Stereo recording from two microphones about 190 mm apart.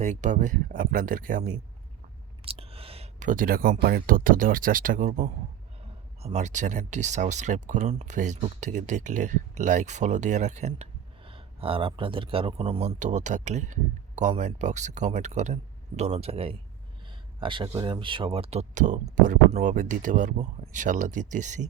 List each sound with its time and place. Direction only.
0.0 s speech: 40° right (ahead or behind)
2.4 s speech: 30° right (ahead or behind)